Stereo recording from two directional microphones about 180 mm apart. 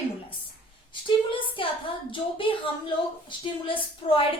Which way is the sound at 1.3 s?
30° left (ahead or behind).